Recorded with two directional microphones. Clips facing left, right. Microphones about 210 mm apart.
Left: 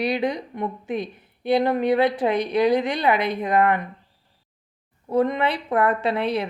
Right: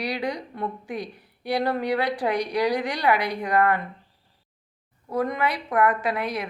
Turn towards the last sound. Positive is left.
turn(degrees=30)  # may be behind; listen again after turning